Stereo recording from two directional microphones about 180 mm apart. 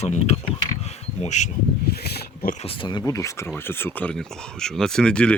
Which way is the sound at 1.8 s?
60° left (ahead or behind).